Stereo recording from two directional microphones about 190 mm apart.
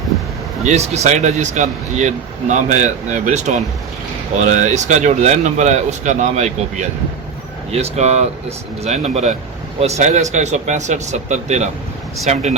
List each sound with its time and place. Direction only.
0.6 s speech: 35° right (ahead or behind)